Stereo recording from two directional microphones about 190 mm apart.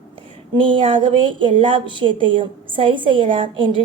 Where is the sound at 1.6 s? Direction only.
25° right (ahead or behind).